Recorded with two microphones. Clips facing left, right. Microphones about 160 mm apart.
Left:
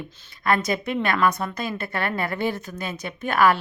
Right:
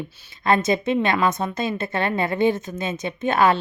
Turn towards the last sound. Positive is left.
turn(degrees=-25)  # may be behind; listen again after turning